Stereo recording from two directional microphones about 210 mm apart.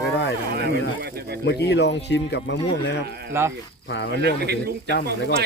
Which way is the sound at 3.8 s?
55° left (ahead or behind).